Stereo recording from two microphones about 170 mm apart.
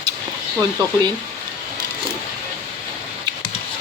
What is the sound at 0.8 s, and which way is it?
Speech, 25° right (ahead or behind).